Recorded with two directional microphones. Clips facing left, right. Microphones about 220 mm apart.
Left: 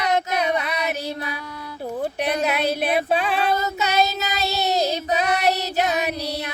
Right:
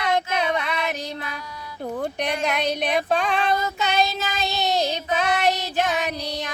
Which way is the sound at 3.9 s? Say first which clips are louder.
Left 3 dB; 40° left (ahead or behind).